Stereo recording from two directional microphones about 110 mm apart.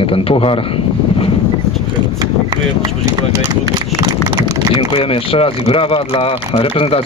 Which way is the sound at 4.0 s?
35° right (ahead or behind).